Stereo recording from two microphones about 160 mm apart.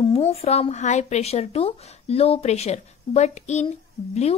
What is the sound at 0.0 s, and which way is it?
Speech, 35° left (ahead or behind).